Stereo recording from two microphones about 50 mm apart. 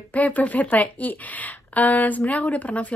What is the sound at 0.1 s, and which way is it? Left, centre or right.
Speech, left.